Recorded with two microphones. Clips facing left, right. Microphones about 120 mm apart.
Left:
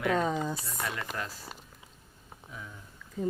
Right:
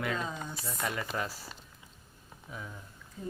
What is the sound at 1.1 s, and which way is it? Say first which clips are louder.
Speech: right 2 dB; 5° right (ahead or behind).